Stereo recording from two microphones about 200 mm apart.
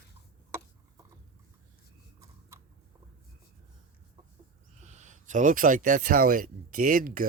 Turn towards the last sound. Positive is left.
turn(degrees=-45)  # may be behind; listen again after turning